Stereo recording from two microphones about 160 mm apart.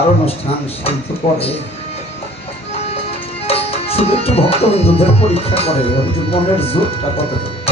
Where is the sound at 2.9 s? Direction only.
40° left (ahead or behind).